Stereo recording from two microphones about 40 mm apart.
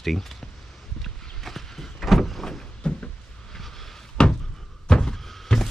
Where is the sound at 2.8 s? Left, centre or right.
Left.